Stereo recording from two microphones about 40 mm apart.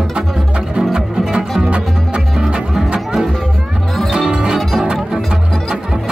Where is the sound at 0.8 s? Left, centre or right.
Centre.